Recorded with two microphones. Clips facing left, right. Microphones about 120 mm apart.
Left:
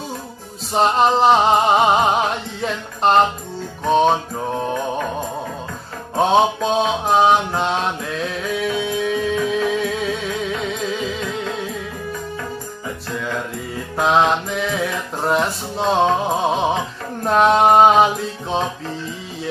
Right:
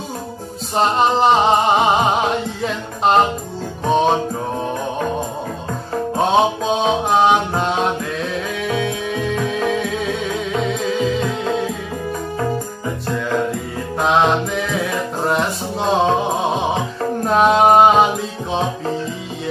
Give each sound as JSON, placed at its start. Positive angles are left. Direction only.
{"t": 0.7, "sound": "music", "side_deg": 0}
{"t": 2.6, "sound": "speech", "side_deg": 0}
{"t": 3.8, "sound": "music", "side_deg": 0}
{"t": 6.1, "sound": "music", "side_deg": 0}
{"t": 13.9, "sound": "music", "side_deg": 0}
{"t": 15.2, "sound": "a sound", "side_deg": 0}
{"t": 17.2, "sound": "music", "side_deg": 0}